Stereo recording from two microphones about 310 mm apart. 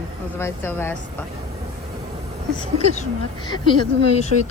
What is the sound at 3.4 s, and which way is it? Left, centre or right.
Speech, centre.